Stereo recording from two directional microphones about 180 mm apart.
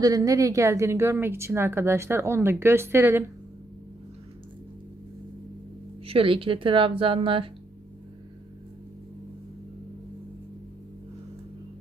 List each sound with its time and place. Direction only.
0.0 s a woman's voice: 20° right (ahead or behind)
6.1 s a woman's voice: 30° right (ahead or behind)